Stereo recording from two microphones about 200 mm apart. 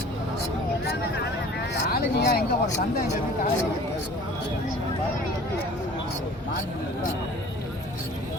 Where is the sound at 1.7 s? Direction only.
55° left (ahead or behind).